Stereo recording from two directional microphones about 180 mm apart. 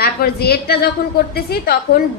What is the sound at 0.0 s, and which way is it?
Speech, 60° left (ahead or behind).